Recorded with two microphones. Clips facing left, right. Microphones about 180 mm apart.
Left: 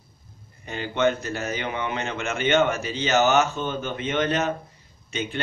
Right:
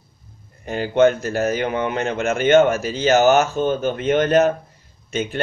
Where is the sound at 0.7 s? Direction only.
45° right (ahead or behind).